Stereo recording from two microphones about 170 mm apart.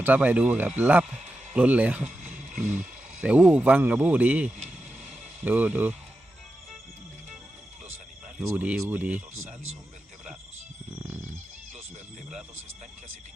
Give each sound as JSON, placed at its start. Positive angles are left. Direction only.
{"t": 0.0, "sound": "speech", "side_deg": -10}
{"t": 2.3, "sound": "music", "side_deg": -50}
{"t": 3.2, "sound": "speech", "side_deg": -5}
{"t": 8.4, "sound": "speech", "side_deg": -5}